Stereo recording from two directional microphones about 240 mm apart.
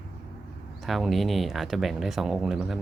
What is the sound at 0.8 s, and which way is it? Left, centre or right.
Speech, centre.